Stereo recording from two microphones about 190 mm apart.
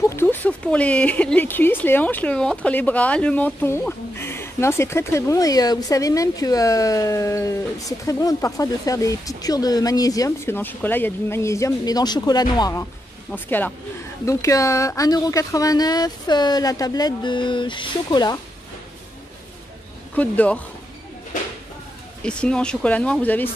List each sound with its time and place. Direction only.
0.1 s speech: 10° left (ahead or behind)
13.3 s speech: 10° left (ahead or behind)
20.2 s speech: 10° left (ahead or behind)
22.2 s speech: 5° left (ahead or behind)